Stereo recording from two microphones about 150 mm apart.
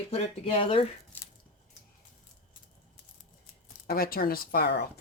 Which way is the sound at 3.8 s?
85° left.